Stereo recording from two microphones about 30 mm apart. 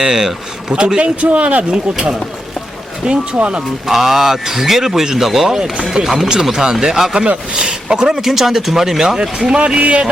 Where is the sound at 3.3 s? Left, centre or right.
Right.